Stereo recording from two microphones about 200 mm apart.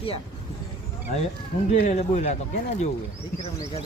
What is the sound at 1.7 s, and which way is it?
Speech, 35° left (ahead or behind).